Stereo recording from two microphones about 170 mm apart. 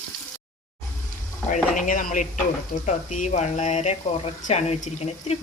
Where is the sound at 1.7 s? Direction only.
50° left (ahead or behind).